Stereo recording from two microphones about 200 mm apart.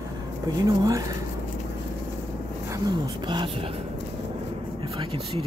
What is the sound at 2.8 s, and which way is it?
Speech, 25° right (ahead or behind).